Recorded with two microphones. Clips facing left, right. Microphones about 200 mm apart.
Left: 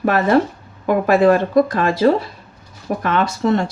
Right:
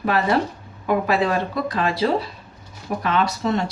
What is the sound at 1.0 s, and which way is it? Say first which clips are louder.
Speech: left 8 dB; 50° left (ahead or behind).